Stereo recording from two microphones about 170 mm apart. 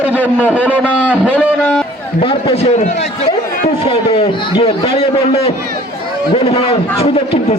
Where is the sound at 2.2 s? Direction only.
30° left (ahead or behind).